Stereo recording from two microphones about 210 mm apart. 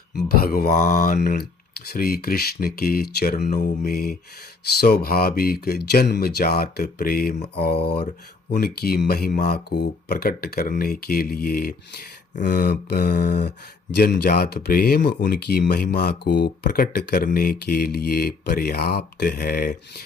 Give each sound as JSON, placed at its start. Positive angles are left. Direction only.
{"t": 0.3, "sound": "speech", "side_deg": 45}